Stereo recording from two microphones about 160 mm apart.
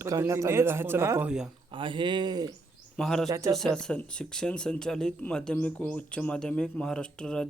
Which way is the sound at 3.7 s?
5° left (ahead or behind).